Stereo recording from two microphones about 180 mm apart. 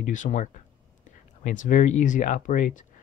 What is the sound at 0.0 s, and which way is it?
Speech, 45° left (ahead or behind).